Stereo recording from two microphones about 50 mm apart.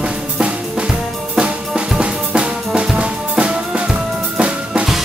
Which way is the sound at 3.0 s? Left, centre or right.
Centre.